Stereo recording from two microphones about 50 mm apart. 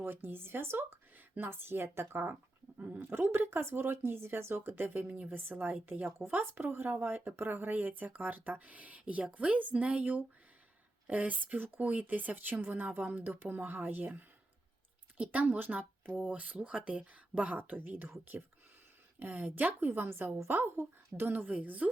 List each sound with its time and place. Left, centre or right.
0.0 s speech: right
13.0 s speech: right
13.2 s speech: right
16.3 s speech: right
17.7 s speech: right
19.2 s speech: right
20.1 s speech: right